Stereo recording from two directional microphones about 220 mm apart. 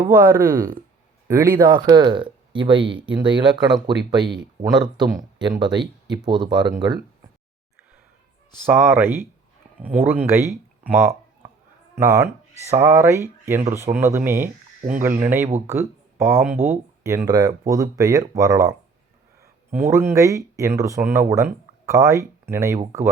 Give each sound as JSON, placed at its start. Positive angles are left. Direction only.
{"t": 0.0, "sound": "speech", "side_deg": -10}
{"t": 8.6, "sound": "speech", "side_deg": -10}
{"t": 15.5, "sound": "speech", "side_deg": -10}
{"t": 19.7, "sound": "speech", "side_deg": -10}